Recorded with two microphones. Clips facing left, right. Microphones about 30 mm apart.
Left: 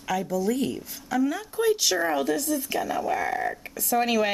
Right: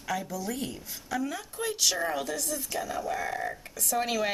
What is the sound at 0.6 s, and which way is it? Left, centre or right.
A woman's voice, centre.